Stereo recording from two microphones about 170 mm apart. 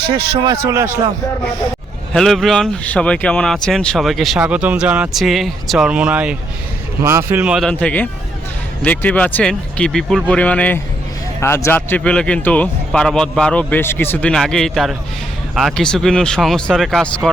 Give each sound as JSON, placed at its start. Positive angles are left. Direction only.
{"t": 0.0, "sound": "speech", "side_deg": -70}
{"t": 0.4, "sound": "speech", "side_deg": -15}
{"t": 2.1, "sound": "speech", "side_deg": 0}